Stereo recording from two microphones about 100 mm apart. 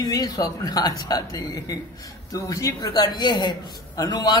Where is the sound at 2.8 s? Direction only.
45° left (ahead or behind).